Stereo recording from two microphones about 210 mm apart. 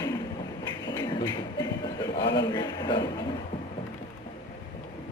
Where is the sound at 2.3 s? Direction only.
20° left (ahead or behind).